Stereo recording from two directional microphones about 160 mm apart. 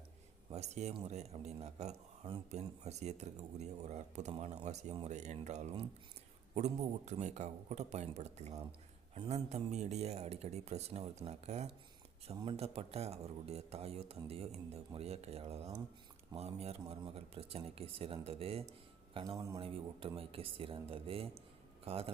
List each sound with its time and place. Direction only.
0.5 s speech: 45° right (ahead or behind)